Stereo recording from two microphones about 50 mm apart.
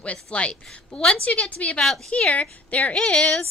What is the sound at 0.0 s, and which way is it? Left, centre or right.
A woman's voice, left.